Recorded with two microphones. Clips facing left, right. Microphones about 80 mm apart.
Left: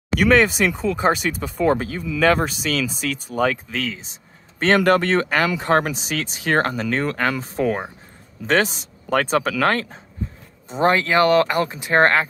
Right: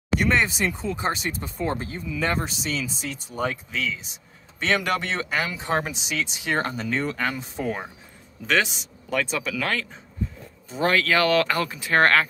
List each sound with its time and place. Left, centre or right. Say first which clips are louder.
0.2 s speech: left 8 dB; left
0.9 s speech: left 7 dB; left
2.4 s speech: left 6 dB; left
10.7 s speech: left 4 dB; left